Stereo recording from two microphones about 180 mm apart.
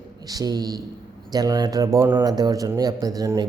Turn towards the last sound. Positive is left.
turn(degrees=-20)  # may be behind; listen again after turning